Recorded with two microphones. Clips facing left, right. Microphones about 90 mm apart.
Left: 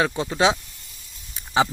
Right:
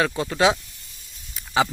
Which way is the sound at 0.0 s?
20° left (ahead or behind).